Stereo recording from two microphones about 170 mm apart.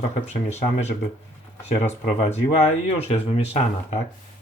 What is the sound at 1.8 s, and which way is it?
Speech, 40° left (ahead or behind).